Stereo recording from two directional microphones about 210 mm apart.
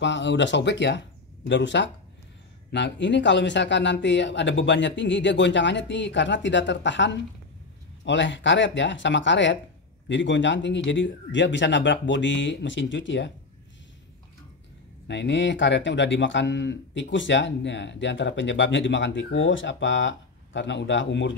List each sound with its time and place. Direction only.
0.0 s speech: 60° left (ahead or behind)
15.0 s speech: 55° left (ahead or behind)